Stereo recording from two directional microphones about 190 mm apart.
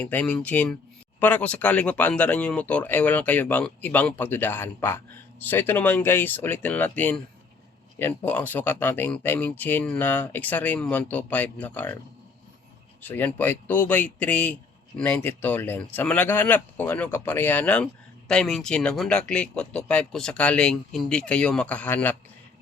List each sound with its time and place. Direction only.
0.0 s speech: 10° left (ahead or behind)
13.1 s speech: 10° left (ahead or behind)